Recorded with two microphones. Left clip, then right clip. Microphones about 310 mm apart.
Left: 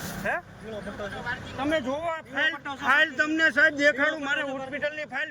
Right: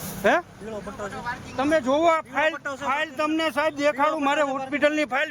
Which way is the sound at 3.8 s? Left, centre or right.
Right.